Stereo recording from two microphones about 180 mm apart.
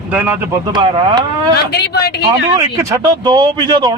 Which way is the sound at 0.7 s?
25° right (ahead or behind).